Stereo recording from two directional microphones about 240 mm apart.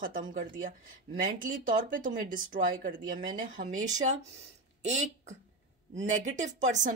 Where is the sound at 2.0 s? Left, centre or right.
Right.